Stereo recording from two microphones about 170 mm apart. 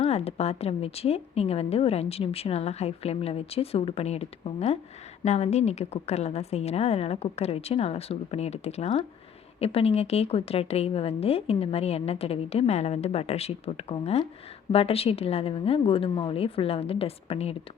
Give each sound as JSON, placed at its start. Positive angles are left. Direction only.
{"t": 0.0, "sound": "a woman's voice", "side_deg": 40}